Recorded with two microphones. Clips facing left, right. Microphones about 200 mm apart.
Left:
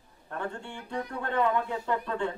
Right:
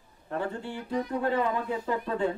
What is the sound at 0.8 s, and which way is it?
Speech, 35° right (ahead or behind).